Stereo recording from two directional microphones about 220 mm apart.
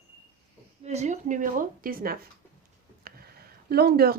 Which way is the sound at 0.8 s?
30° right (ahead or behind).